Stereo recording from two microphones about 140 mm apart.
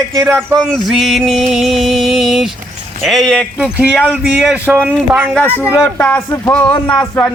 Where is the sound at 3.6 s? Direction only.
10° right (ahead or behind).